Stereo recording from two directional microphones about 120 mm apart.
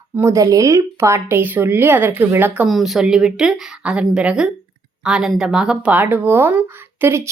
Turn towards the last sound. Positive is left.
turn(degrees=-20)  # may be behind; listen again after turning